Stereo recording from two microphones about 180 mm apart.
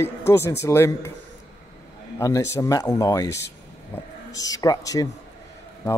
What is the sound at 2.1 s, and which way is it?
Speech, 15° left (ahead or behind).